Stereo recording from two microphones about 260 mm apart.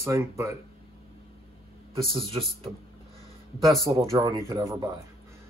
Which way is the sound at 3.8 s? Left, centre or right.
Centre.